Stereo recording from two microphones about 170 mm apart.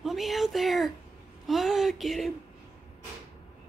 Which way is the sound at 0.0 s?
Centre (ahead or behind).